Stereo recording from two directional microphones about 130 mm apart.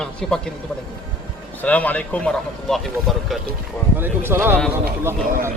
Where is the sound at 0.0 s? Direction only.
5° left (ahead or behind).